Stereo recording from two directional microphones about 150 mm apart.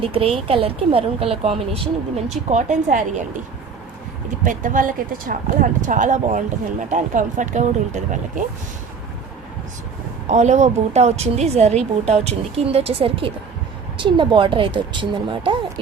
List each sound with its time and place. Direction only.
0.0 s speech: 40° right (ahead or behind); by 3.4 s 55° right (ahead or behind)
4.4 s speech: 60° right (ahead or behind)
10.2 s a woman's voice: 50° right (ahead or behind); by 15.5 s 35° right (ahead or behind)